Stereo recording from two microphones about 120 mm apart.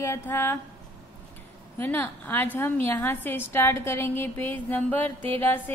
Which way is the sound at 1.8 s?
15° left (ahead or behind).